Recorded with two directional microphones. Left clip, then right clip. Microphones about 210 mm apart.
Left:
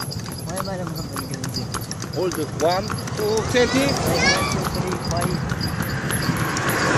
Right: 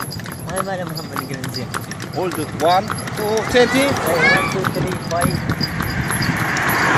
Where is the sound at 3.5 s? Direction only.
45° right (ahead or behind).